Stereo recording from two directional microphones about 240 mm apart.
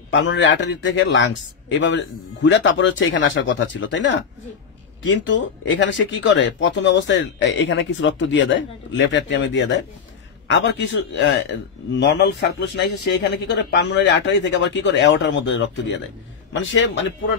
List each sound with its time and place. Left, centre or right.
0.1 s a man's voice: left